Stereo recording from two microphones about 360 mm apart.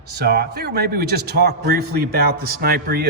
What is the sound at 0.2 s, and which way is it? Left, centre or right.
Speech, right.